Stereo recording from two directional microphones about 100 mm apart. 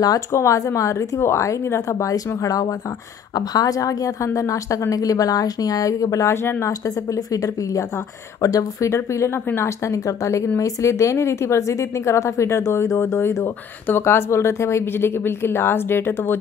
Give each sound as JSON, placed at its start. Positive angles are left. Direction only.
{"t": 0.3, "sound": "a woman's voice", "side_deg": 30}